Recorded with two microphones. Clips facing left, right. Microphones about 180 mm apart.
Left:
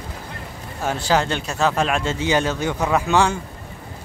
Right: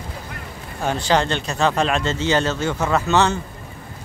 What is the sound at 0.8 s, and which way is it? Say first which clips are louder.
Speech: right 1 dB; 5° left (ahead or behind).